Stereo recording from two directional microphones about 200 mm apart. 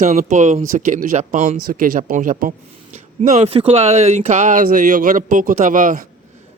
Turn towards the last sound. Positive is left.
turn(degrees=-40)  # may be behind; listen again after turning